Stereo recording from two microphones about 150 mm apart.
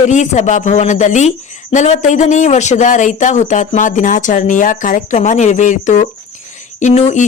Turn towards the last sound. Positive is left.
turn(degrees=50)  # may be behind; listen again after turning